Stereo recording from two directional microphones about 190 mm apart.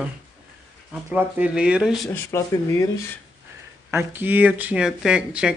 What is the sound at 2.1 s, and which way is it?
Speech, 15° left (ahead or behind).